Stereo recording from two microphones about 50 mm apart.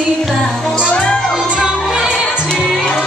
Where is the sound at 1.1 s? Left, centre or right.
Centre.